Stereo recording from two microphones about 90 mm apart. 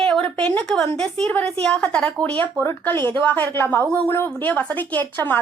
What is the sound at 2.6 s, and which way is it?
A woman's voice, 25° left (ahead or behind).